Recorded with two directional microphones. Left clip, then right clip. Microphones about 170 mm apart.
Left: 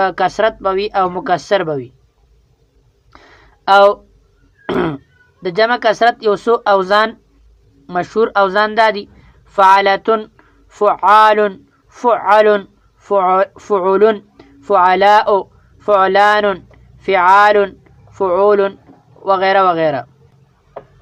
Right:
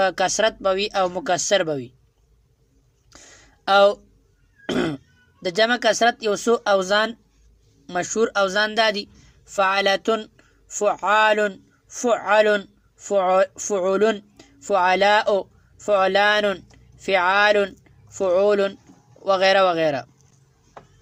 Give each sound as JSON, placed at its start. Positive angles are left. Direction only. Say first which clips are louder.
{"t": 0.0, "sound": "a woman's voice", "louder": "left 6 dB", "side_deg": -25}
{"t": 3.1, "sound": "a sound", "louder": "left 5 dB", "side_deg": -25}
{"t": 4.6, "sound": "throat clearing", "louder": "left 7 dB", "side_deg": -30}
{"t": 5.4, "sound": "a woman's voice", "louder": "left 6 dB", "side_deg": -25}